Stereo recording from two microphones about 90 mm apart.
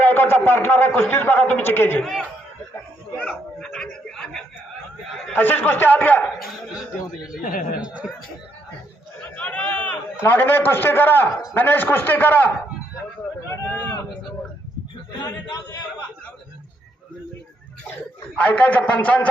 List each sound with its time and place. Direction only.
0.0 s a man's voice: 25° left (ahead or behind)
2.0 s speech: centre (ahead or behind)
3.2 s dog: 5° left (ahead or behind)
5.3 s a man's voice: 25° left (ahead or behind)
7.2 s speech: 5° right (ahead or behind)
9.3 s a sound: 15° left (ahead or behind)
10.2 s a man's voice: 25° left (ahead or behind)
18.3 s a man's voice: 15° left (ahead or behind)